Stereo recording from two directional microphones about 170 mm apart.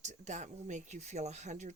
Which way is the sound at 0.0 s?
45° right (ahead or behind).